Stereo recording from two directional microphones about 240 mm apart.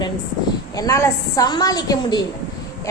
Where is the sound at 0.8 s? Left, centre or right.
Centre.